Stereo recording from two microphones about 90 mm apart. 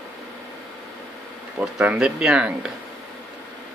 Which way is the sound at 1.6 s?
15° right (ahead or behind).